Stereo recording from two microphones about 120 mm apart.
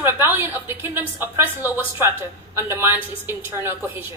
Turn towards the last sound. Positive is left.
turn(degrees=-15)  # may be behind; listen again after turning